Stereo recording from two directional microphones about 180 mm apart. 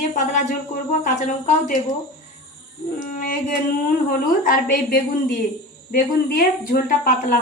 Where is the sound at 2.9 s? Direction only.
45° left (ahead or behind).